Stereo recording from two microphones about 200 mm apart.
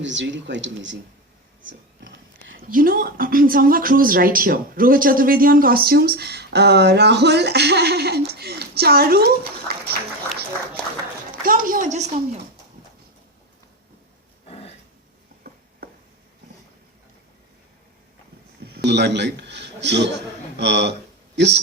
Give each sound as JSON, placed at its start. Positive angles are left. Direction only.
{"t": 0.0, "sound": "speech", "side_deg": -65}
{"t": 1.6, "sound": "whispering", "side_deg": -70}
{"t": 2.6, "sound": "speech", "side_deg": -45}
{"t": 11.4, "sound": "speech", "side_deg": -45}
{"t": 14.4, "sound": "a sound", "side_deg": 30}
{"t": 18.6, "sound": "a sound", "side_deg": -55}
{"t": 20.6, "sound": "speech", "side_deg": -60}